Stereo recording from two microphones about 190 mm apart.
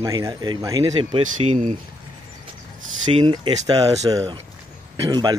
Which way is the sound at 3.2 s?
25° right (ahead or behind).